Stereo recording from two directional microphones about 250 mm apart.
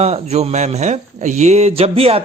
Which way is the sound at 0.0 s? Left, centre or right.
Right.